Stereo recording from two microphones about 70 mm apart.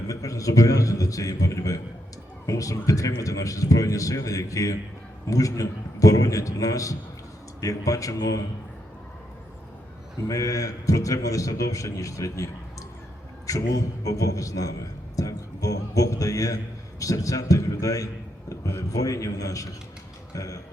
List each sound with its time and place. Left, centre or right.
0.1 s a man's voice: left
10.2 s a man's voice: left
13.5 s a man's voice: left
15.1 s music: left
17.0 s a man's voice: left